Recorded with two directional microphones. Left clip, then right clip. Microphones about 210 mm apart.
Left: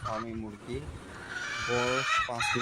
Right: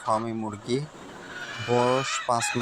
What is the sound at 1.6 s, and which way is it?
Speech, 35° right (ahead or behind).